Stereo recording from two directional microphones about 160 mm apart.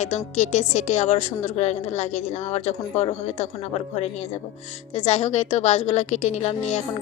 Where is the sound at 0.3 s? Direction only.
45° left (ahead or behind).